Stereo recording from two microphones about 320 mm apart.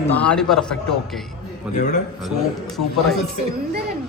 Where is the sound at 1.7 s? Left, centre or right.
Left.